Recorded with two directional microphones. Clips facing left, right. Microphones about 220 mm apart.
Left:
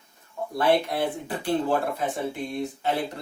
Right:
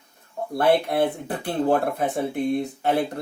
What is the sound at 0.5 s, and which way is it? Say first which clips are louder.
Speech: right 3 dB; 55° right (ahead or behind).